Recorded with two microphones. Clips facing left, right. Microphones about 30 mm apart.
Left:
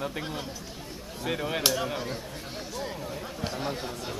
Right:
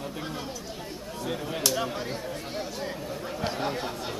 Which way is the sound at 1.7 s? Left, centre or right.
Centre.